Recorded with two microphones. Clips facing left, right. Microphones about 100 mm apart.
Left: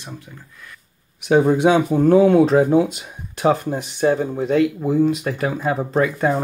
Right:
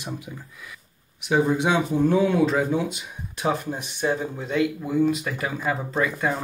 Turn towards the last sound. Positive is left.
turn(degrees=40)  # may be behind; listen again after turning